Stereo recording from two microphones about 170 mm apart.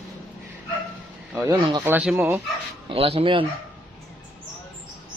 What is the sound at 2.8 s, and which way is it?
Speech, 35° right (ahead or behind).